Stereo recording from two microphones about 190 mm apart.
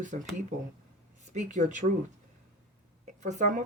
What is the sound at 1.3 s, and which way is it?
Speech, 40° right (ahead or behind).